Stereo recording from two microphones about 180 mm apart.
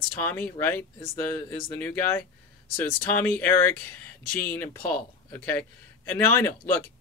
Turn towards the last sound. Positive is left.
turn(degrees=15)  # may be behind; listen again after turning